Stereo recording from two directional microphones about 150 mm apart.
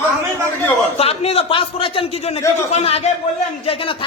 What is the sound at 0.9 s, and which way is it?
A man's voice, 45° left (ahead or behind).